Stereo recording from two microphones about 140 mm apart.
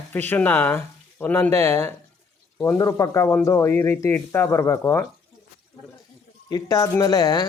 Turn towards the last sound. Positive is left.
turn(degrees=25)  # may be behind; listen again after turning